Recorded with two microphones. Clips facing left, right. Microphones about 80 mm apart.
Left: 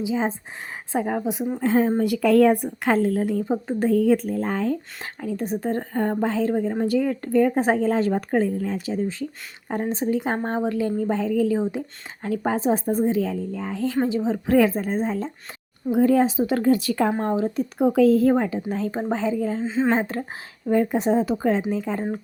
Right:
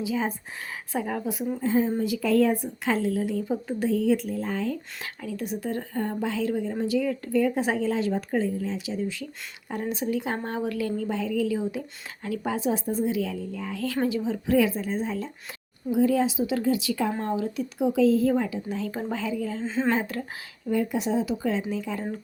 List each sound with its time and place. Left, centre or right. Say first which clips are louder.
0.0 s a woman's voice: left 4 dB; left
1.6 s speech: left 4 dB; left
2.0 s a woman's voice: left 5 dB; left
3.8 s a woman's voice: left 5 dB; left
11.1 s speech: left 5 dB; left
14.4 s a woman's voice: left 4 dB; left
15.9 s a woman's voice: left 4 dB; left
17.2 s speech: left 5 dB; left
17.7 s a woman's voice: left 4 dB; left
18.9 s speech: left 8 dB; left
19.6 s speech: left 3 dB; centre
19.9 s speech: left 4 dB; left
20.7 s a woman's voice: left 6 dB; left